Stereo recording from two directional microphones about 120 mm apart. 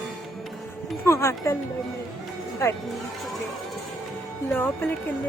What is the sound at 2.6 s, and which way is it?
Speech, 25° left (ahead or behind).